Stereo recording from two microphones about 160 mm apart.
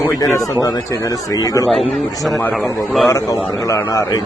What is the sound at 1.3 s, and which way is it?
Speech, 20° left (ahead or behind).